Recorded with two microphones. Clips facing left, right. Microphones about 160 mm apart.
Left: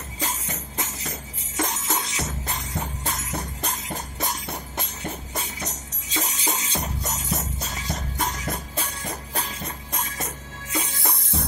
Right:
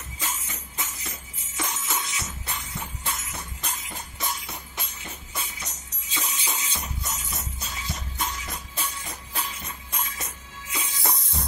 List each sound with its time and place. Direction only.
0.2 s music: 40° left (ahead or behind)